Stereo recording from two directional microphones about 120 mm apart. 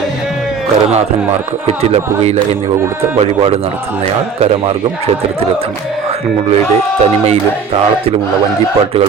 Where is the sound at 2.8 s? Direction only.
20° right (ahead or behind).